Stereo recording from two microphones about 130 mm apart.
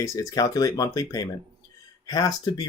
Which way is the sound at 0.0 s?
25° left (ahead or behind).